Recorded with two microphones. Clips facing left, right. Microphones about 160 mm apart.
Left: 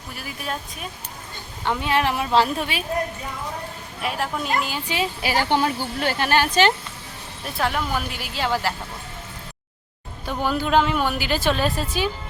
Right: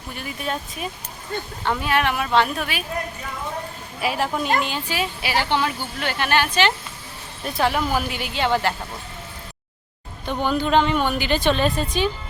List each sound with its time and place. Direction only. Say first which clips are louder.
0.1 s a woman's voice: right 3 dB; centre (ahead or behind)
1.8 s speech: left 1 dB; 30° left (ahead or behind)
4.0 s a woman's voice: right 3 dB; centre (ahead or behind)
4.9 s speech: left 2 dB; 20° left (ahead or behind)
5.2 s speech: left 2 dB; 45° left (ahead or behind)
7.4 s a woman's voice: right 3 dB; centre (ahead or behind)
10.2 s a woman's voice: right 2 dB; 5° left (ahead or behind)